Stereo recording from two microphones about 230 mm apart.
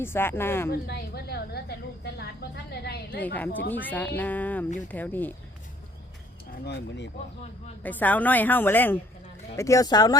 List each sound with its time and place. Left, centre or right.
0.0 s a woman's voice: centre
0.7 s a sound: left
3.2 s a woman's voice: centre
6.7 s speech: left
7.8 s a woman's voice: centre